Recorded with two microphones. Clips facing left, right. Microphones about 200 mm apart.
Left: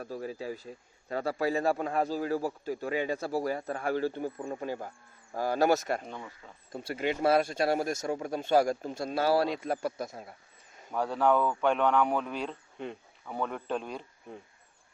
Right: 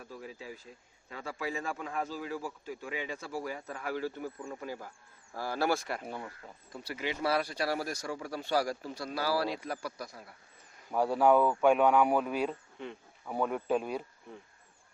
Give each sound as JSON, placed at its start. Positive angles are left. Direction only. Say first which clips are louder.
{"t": 0.0, "sound": "speech", "louder": "left 8 dB", "side_deg": 40}
{"t": 4.6, "sound": "a man's voice", "louder": "left 5 dB", "side_deg": 25}
{"t": 6.1, "sound": "speech", "louder": "right 1 dB", "side_deg": -5}
{"t": 7.0, "sound": "speech", "louder": "left 5 dB", "side_deg": 50}
{"t": 7.3, "sound": "a man's voice", "louder": "left 6 dB", "side_deg": 25}
{"t": 10.9, "sound": "speech", "louder": "right 2 dB", "side_deg": -10}